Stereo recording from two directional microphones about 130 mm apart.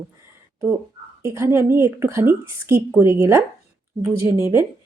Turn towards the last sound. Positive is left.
turn(degrees=-25)  # may be behind; listen again after turning